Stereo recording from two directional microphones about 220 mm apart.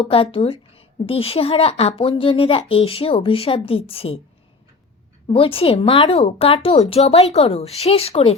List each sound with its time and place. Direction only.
0.0 s a woman's voice: 25° left (ahead or behind)
5.3 s a woman's voice: 25° left (ahead or behind)